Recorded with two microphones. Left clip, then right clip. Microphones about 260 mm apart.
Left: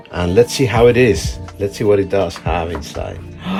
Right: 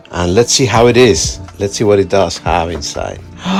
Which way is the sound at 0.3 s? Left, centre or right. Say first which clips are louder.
Right 2 dB; centre.